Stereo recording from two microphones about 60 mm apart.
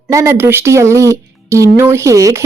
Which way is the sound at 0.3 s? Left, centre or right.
Right.